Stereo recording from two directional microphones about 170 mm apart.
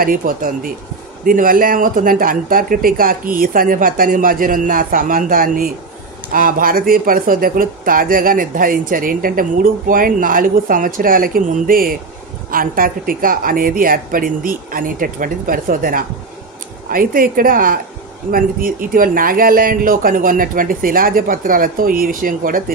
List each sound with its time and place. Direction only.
0.0 s speech: 55° right (ahead or behind)